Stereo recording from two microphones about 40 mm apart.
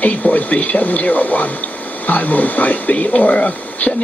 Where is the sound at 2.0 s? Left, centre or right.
Left.